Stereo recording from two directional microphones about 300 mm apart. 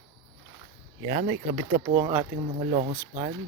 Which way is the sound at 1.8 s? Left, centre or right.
Centre.